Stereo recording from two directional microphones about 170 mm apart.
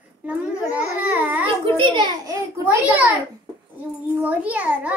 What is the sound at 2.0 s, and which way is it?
A child's voice, 20° right (ahead or behind).